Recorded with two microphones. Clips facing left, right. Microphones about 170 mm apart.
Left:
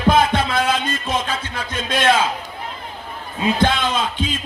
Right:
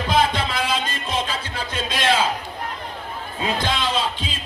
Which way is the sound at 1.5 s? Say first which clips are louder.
Left 1 dB; 30° right (ahead or behind).